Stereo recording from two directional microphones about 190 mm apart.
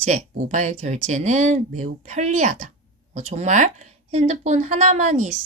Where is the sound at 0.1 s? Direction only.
40° right (ahead or behind).